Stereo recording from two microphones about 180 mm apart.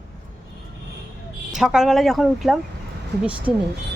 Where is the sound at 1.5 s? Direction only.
Centre (ahead or behind).